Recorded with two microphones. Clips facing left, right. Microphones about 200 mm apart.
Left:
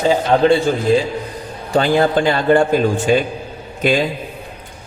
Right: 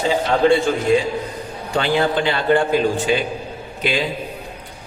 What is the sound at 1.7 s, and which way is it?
Mantra, 45° left (ahead or behind).